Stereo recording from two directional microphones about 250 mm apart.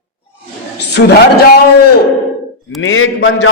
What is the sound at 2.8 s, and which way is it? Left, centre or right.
Speech, left.